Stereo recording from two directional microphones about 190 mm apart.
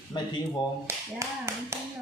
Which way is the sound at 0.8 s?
15° right (ahead or behind).